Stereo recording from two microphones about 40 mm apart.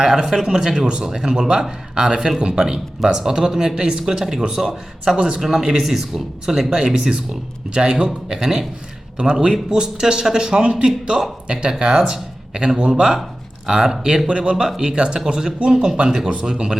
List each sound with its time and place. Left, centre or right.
0.0 s speech: centre
2.7 s speech: centre
16.3 s speech: right